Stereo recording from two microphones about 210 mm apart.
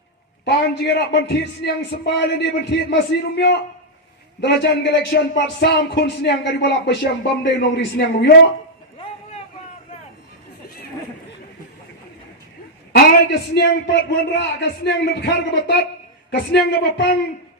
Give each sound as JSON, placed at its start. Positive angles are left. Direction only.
{"t": 0.4, "sound": "a man's voice", "side_deg": 55}
{"t": 12.9, "sound": "speech", "side_deg": 50}